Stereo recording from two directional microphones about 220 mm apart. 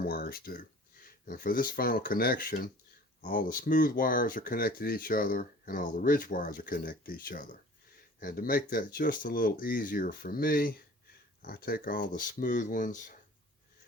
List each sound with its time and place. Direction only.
0.0 s speech: 45° left (ahead or behind)